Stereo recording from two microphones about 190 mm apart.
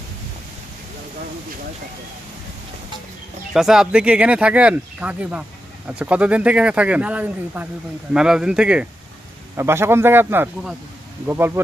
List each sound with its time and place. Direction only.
3.5 s speech: centre (ahead or behind)